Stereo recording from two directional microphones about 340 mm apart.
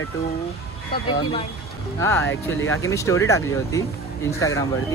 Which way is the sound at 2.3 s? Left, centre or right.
Left.